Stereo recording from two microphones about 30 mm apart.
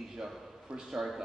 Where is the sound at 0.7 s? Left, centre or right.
Right.